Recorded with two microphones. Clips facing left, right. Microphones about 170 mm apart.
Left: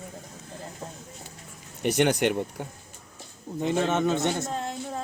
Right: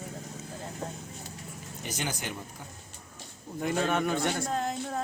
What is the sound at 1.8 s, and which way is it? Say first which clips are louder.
Speech: left 13 dB; 70° left (ahead or behind).